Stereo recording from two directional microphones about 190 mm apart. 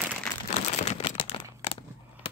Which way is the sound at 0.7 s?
35° left (ahead or behind).